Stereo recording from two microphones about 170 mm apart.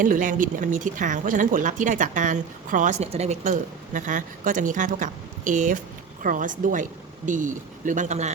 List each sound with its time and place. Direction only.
0.0 s speech: 50° right (ahead or behind)